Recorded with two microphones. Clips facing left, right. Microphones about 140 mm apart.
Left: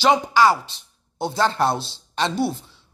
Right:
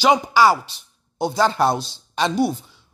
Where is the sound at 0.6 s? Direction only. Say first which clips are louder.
Left 1 dB; 25° left (ahead or behind).